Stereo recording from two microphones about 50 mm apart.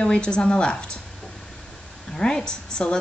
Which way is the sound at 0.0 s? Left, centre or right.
Centre.